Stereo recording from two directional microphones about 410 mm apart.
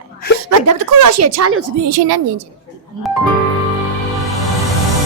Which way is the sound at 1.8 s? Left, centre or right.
Right.